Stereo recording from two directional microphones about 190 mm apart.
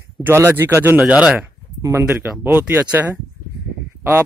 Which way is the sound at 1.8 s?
15° right (ahead or behind).